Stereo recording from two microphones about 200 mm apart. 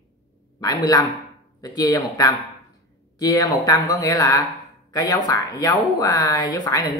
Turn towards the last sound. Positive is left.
turn(degrees=20)  # may be behind; listen again after turning